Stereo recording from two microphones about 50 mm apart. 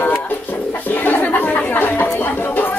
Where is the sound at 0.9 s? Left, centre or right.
Left.